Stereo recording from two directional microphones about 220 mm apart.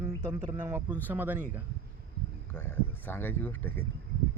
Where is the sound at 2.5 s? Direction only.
10° left (ahead or behind).